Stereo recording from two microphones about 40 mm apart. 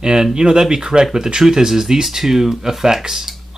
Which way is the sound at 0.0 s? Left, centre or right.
Centre.